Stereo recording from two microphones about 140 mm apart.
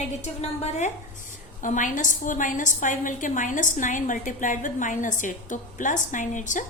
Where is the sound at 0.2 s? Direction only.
50° left (ahead or behind).